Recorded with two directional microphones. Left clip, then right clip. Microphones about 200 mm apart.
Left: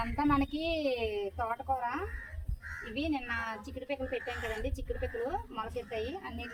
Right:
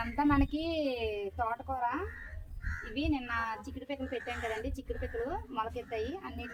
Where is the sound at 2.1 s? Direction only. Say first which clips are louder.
Left 1 dB; 50° left (ahead or behind).